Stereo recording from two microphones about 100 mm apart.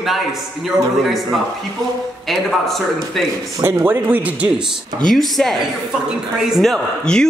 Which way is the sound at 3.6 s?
25° right (ahead or behind).